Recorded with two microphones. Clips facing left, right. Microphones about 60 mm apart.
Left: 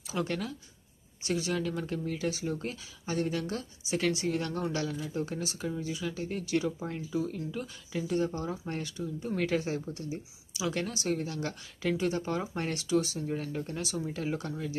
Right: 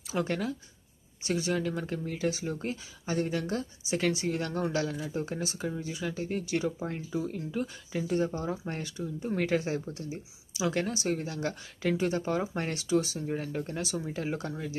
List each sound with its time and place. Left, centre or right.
0.1 s speech: centre
1.4 s speech: centre
4.8 s speech: right
6.9 s speech: right